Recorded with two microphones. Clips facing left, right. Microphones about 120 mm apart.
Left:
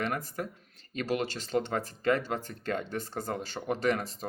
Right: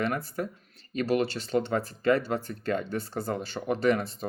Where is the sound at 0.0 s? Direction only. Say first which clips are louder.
Right 3 dB; 40° left (ahead or behind).